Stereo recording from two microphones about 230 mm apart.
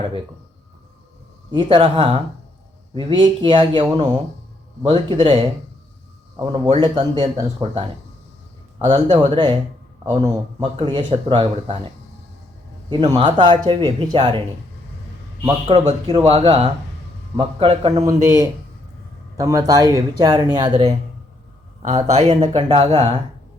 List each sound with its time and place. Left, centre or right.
1.5 s speech: centre
12.9 s speech: centre
15.4 s speech: right
19.4 s speech: centre
21.8 s speech: right